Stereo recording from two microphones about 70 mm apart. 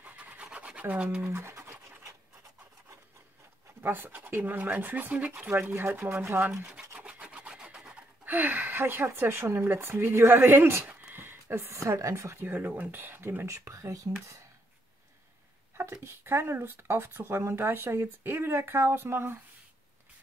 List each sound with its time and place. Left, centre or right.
0.0 s scratch: right
1.2 s scratch: right
3.8 s speech: right
7.0 s rub: centre
8.3 s speech: right
15.8 s speech: right